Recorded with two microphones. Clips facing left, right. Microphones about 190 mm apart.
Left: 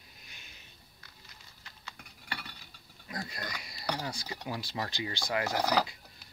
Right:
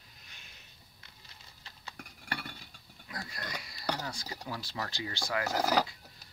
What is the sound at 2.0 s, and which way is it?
Chink, 50° right (ahead or behind).